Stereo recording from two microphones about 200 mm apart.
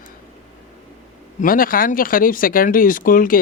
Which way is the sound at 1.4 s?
45° left (ahead or behind).